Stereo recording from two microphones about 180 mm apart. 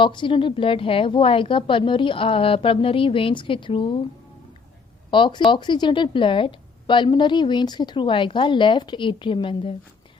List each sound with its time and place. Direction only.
0.0 s a woman's voice: 25° left (ahead or behind)
5.1 s a woman's voice: 25° left (ahead or behind)